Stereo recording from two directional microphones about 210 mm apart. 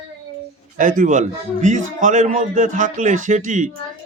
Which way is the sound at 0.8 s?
40° right (ahead or behind).